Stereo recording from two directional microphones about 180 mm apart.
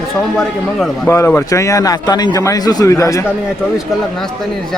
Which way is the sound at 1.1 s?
15° left (ahead or behind).